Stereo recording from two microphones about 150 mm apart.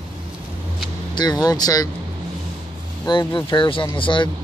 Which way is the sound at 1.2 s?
25° left (ahead or behind).